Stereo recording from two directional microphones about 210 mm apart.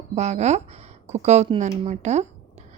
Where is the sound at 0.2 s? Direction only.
35° right (ahead or behind).